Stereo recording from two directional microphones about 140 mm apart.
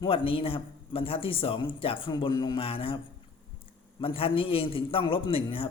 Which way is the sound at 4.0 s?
40° left (ahead or behind).